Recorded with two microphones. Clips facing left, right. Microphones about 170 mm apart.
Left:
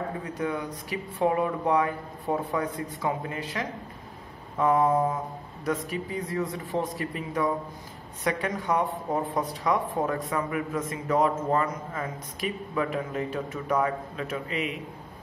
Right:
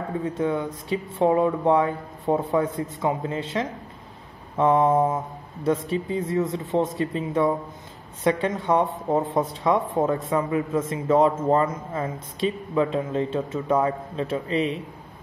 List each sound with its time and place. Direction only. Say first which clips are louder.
0.2 s a man's voice: right 6 dB; 25° right (ahead or behind)